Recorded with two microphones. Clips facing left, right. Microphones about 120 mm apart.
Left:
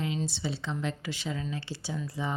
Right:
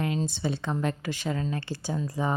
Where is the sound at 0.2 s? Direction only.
50° right (ahead or behind).